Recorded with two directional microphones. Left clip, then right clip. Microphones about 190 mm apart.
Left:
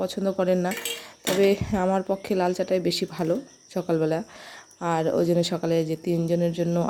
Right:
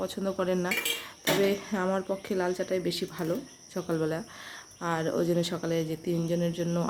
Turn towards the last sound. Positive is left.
turn(degrees=25)  # may be behind; listen again after turning